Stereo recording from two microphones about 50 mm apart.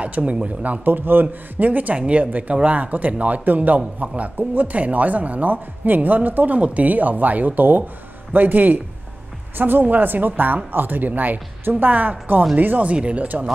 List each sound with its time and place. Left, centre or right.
0.0 s speech: right